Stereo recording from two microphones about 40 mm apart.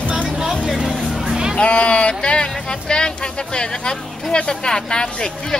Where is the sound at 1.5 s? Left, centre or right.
Left.